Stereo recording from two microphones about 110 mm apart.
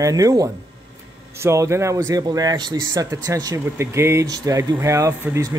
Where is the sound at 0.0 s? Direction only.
30° right (ahead or behind).